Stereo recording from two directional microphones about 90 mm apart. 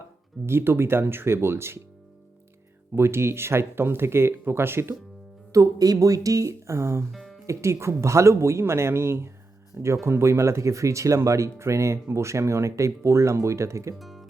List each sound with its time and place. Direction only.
0.4 s speech: 25° right (ahead or behind)
2.9 s speech: 30° right (ahead or behind)
5.5 s speech: 40° right (ahead or behind)
7.1 s music: centre (ahead or behind)
7.4 s speech: 35° right (ahead or behind)
13.9 s music: centre (ahead or behind)